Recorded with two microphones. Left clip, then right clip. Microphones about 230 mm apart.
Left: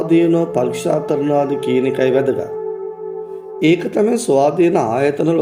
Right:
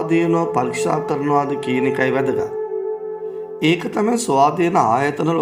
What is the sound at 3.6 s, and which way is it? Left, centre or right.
Speech, centre.